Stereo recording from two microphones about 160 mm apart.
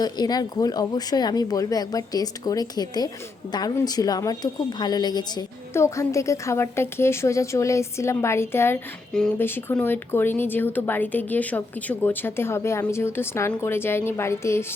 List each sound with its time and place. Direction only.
0.0 s a woman's voice: 25° left (ahead or behind)